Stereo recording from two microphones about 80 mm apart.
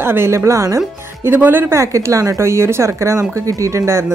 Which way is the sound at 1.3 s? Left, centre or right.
Right.